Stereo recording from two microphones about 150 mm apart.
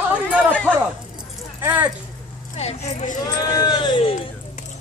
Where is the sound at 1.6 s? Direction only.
10° right (ahead or behind).